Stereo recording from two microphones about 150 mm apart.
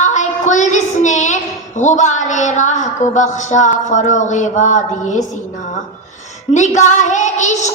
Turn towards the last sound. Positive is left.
turn(degrees=50)  # may be behind; listen again after turning